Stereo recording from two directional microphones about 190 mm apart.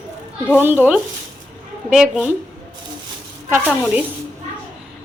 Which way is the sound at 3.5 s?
10° right (ahead or behind).